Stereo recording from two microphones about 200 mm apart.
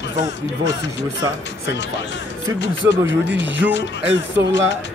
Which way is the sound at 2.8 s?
70° right (ahead or behind).